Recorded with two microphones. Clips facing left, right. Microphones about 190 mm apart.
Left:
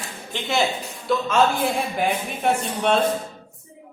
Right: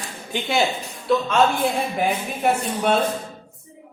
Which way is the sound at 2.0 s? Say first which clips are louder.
Right 1 dB; centre (ahead or behind).